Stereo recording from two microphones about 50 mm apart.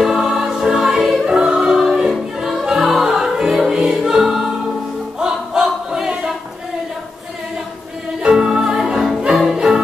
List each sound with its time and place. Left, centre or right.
0.0 s music: centre
1.2 s music: centre
2.0 s music: centre
2.6 s music: centre
5.2 s choir: centre
8.3 s music: centre